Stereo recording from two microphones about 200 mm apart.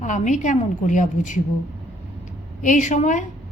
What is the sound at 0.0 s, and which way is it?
Speech, 40° left (ahead or behind).